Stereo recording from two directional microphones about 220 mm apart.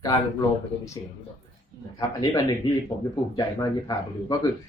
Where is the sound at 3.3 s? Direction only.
15° left (ahead or behind).